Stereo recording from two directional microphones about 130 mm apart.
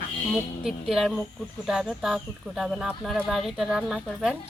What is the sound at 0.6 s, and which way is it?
Speech, centre (ahead or behind).